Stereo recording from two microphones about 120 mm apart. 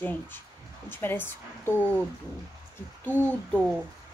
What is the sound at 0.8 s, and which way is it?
Speech, 20° left (ahead or behind).